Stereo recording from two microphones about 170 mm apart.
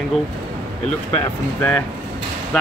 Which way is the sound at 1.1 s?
5° left (ahead or behind).